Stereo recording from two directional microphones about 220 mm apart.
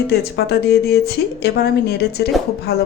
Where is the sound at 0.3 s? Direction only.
45° left (ahead or behind).